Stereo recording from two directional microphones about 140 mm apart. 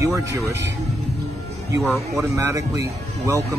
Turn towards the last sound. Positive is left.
turn(degrees=-25)  # may be behind; listen again after turning